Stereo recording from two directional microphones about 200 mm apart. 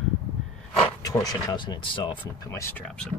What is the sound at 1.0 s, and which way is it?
Speech, 20° left (ahead or behind).